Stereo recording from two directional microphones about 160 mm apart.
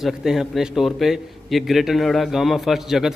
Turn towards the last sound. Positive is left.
turn(degrees=0)  # may be behind; listen again after turning